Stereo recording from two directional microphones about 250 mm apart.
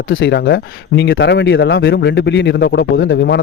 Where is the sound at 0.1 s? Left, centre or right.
Left.